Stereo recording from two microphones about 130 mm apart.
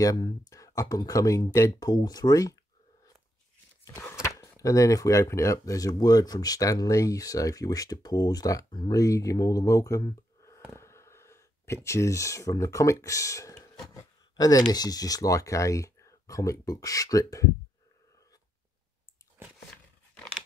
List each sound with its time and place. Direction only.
0.0 s speech: 30° left (ahead or behind)
3.8 s speech: 20° left (ahead or behind)
10.7 s a sound: 20° left (ahead or behind)
14.7 s speech: 30° left (ahead or behind)